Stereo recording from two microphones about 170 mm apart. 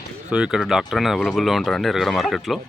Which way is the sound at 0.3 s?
5° right (ahead or behind).